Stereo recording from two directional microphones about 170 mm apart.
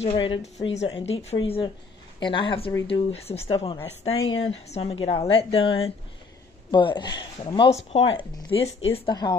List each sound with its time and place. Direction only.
0.0 s a woman's voice: 30° left (ahead or behind)